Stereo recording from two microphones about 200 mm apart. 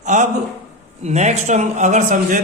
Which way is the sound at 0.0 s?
35° right (ahead or behind).